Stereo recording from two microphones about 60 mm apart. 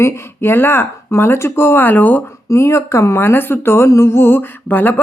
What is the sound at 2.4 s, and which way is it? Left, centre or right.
Speech, left.